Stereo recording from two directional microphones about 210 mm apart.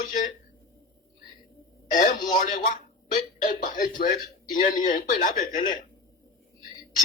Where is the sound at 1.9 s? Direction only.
35° left (ahead or behind).